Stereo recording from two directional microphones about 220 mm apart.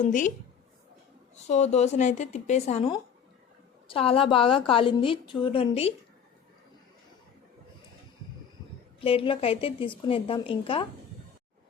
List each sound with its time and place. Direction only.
0.0 s speech: 35° left (ahead or behind)
1.5 s a woman's voice: 30° left (ahead or behind)
9.0 s a woman's voice: 25° left (ahead or behind)